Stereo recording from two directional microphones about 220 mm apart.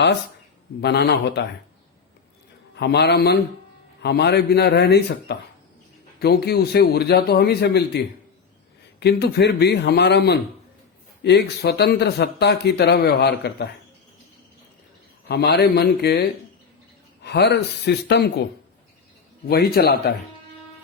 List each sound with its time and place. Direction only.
0.8 s speech: 50° left (ahead or behind)
2.7 s speech: 50° left (ahead or behind)
15.3 s speech: 50° left (ahead or behind)
17.2 s speech: 50° left (ahead or behind)
19.5 s speech: 45° left (ahead or behind)